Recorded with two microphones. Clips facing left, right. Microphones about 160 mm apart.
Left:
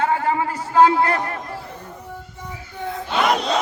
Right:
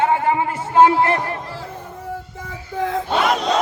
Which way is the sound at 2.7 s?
90° right.